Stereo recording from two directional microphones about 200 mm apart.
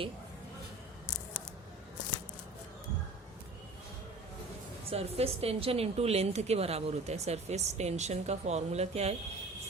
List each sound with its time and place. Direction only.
4.9 s a woman's voice: 30° right (ahead or behind)